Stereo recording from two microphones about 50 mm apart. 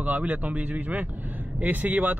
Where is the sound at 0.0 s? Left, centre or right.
Right.